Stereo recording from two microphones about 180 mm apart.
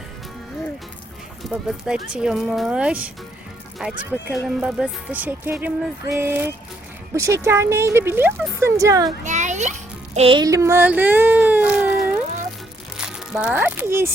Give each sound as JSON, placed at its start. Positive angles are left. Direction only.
{"t": 1.5, "sound": "speech", "side_deg": 0}
{"t": 9.2, "sound": "a child's voice", "side_deg": -40}
{"t": 10.2, "sound": "a sound", "side_deg": -30}
{"t": 13.1, "sound": "a child's voice", "side_deg": -5}